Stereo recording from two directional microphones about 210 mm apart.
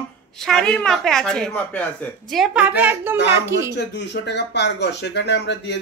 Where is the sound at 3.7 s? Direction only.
55° left (ahead or behind).